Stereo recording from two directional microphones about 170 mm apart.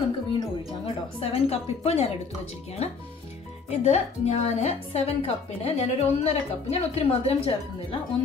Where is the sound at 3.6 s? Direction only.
40° left (ahead or behind).